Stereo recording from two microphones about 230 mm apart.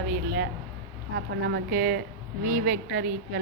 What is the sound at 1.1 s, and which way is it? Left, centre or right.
A woman's voice, right.